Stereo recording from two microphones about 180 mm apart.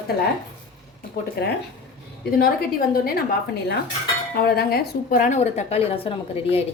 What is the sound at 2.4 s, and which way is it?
Speech, 55° left (ahead or behind).